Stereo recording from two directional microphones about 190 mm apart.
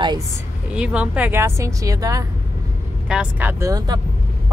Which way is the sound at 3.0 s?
5° right (ahead or behind).